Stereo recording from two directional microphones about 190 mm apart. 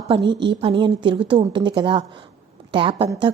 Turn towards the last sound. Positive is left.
turn(degrees=-30)  # may be behind; listen again after turning